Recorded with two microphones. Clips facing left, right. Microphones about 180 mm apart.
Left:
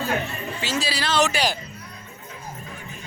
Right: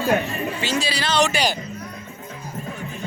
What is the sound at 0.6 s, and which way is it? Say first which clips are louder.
Speech: even; centre (ahead or behind).